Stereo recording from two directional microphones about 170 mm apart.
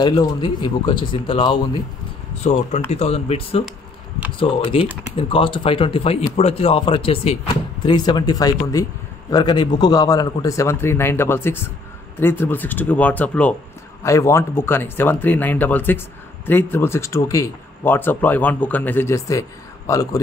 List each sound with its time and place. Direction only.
0.0 s speech: 25° left (ahead or behind)
2.4 s speech: 45° left (ahead or behind); by 20.2 s 20° left (ahead or behind)